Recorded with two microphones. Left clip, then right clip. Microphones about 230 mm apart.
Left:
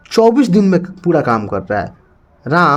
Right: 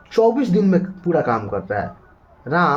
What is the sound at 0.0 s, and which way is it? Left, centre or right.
Speech, left.